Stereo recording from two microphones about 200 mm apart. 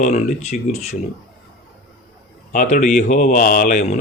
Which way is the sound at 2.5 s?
40° left (ahead or behind).